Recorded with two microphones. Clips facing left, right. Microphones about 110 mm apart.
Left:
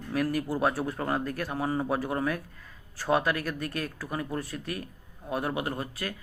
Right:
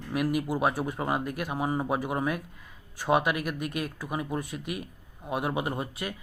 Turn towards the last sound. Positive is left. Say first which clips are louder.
# right 1 dB
turn(degrees=-20)  # may be behind; listen again after turning